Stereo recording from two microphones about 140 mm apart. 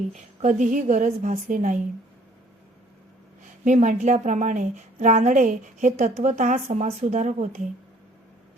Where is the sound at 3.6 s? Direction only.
60° right (ahead or behind).